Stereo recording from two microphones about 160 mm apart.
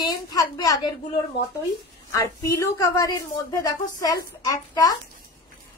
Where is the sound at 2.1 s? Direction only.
20° left (ahead or behind).